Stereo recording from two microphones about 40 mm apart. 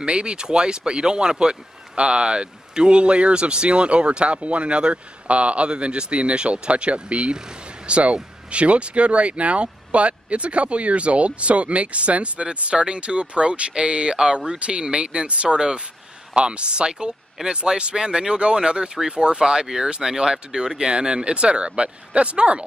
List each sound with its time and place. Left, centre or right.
0.0 s speech: right